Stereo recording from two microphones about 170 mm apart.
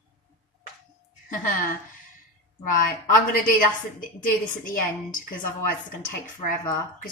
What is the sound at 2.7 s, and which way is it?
Speech, 55° left (ahead or behind).